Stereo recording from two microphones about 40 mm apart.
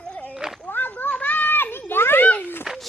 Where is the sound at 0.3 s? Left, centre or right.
Centre.